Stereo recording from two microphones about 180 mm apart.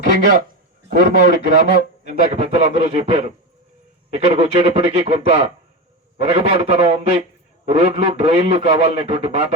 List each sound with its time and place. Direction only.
0.9 s a man's voice: 50° right (ahead or behind)